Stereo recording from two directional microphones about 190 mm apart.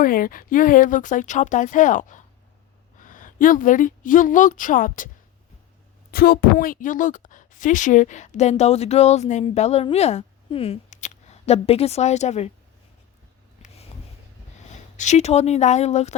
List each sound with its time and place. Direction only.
0.0 s a woman's voice: 45° left (ahead or behind)
6.1 s speech: 55° left (ahead or behind); by 12.5 s 35° left (ahead or behind)
14.7 s speech: 40° left (ahead or behind)